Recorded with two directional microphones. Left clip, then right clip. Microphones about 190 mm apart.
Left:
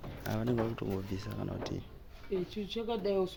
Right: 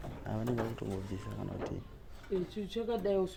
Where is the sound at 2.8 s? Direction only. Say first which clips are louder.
Even; 15° left (ahead or behind).